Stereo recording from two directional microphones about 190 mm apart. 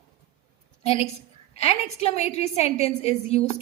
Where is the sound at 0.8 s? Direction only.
35° left (ahead or behind).